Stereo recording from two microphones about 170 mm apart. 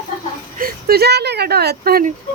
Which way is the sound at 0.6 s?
65° right (ahead or behind).